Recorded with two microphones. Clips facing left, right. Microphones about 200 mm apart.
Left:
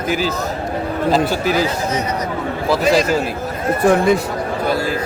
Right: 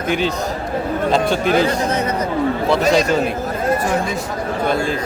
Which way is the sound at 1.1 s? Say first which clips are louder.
Right 1 dB; 5° left (ahead or behind).